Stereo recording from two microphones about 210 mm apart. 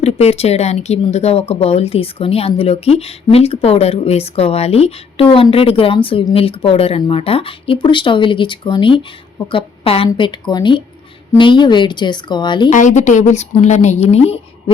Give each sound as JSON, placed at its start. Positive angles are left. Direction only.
{"t": 0.0, "sound": "speech", "side_deg": 30}
{"t": 12.7, "sound": "a woman's voice", "side_deg": 35}